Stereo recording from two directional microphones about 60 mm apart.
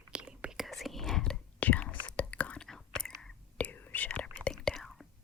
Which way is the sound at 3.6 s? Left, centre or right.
Left.